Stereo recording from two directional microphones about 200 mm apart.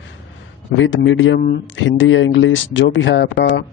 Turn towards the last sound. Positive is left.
turn(degrees=65)  # may be behind; listen again after turning